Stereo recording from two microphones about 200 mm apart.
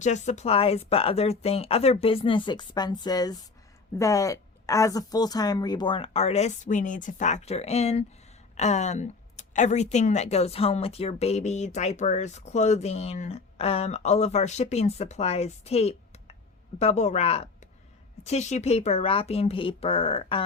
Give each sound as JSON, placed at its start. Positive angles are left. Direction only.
{"t": 0.0, "sound": "a woman's voice", "side_deg": 35}